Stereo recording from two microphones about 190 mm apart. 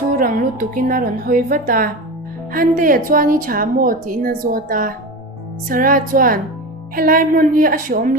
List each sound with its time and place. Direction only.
0.2 s speech: 45° right (ahead or behind)